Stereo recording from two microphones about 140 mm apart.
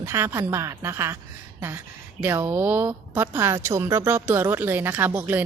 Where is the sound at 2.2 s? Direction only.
15° right (ahead or behind).